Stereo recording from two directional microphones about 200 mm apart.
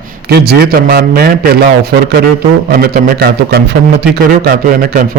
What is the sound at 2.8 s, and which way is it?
A man's voice, 50° right (ahead or behind).